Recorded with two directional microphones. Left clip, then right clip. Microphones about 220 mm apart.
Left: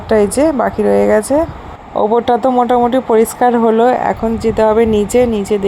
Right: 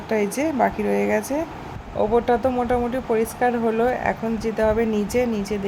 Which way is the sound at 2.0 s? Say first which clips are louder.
Left 7 dB; 20° left (ahead or behind).